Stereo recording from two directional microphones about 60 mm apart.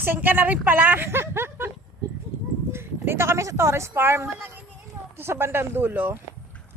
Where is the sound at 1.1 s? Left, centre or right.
Right.